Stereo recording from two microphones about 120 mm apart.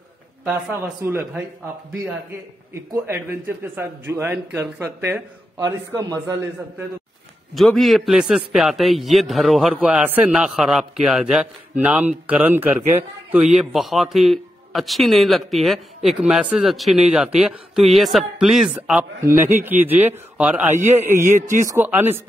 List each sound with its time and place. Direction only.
0.7 s speech: 15° right (ahead or behind)
2.7 s a man's voice: 20° right (ahead or behind)
7.5 s a man's voice: centre (ahead or behind); by 12.8 s 15° right (ahead or behind)
13.5 s a man's voice: 5° right (ahead or behind)
21.1 s a man's voice: 90° right
21.6 s speech: 15° right (ahead or behind)